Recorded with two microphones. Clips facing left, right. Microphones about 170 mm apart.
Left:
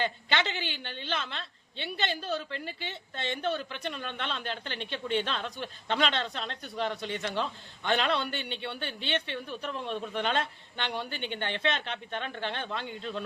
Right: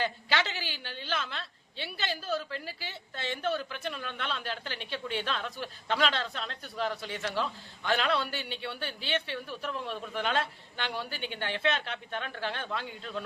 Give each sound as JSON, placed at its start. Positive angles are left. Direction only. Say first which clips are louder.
{"t": 0.0, "sound": "a woman's voice", "louder": "left 1 dB", "side_deg": -5}
{"t": 5.2, "sound": "a man's voice", "louder": "even", "side_deg": 25}
{"t": 5.9, "sound": "a woman's voice", "louder": "even", "side_deg": -5}
{"t": 9.5, "sound": "a man's voice", "louder": "left 1 dB", "side_deg": 25}
{"t": 9.9, "sound": "a woman's voice", "louder": "left 2 dB", "side_deg": -5}